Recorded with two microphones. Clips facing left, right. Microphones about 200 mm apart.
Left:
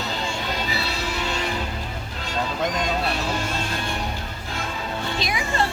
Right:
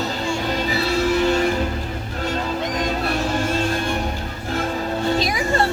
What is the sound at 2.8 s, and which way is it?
Music, 50° right (ahead or behind).